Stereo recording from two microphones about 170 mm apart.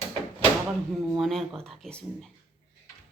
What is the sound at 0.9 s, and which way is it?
Speech, centre (ahead or behind).